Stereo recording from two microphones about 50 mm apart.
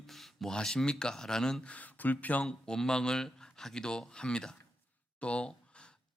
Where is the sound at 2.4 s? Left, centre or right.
Centre.